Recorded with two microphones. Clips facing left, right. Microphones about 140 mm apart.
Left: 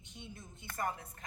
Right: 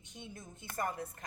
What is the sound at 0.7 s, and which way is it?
Speech, 40° right (ahead or behind).